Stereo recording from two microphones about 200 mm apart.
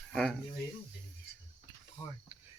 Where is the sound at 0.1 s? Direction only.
5° left (ahead or behind).